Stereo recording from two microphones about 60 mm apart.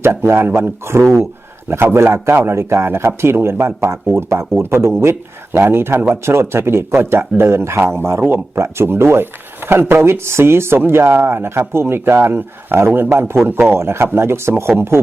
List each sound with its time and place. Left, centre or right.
0.0 s speech: right